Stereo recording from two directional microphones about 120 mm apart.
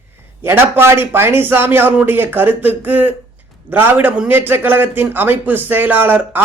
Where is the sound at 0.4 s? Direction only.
20° right (ahead or behind).